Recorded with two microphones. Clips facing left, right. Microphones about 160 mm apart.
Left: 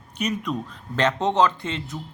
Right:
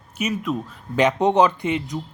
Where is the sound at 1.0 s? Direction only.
15° right (ahead or behind).